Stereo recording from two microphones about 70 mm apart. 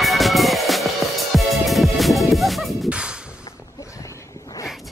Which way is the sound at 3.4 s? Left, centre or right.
Left.